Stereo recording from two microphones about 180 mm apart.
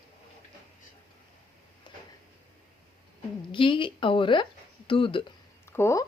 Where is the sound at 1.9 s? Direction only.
25° left (ahead or behind).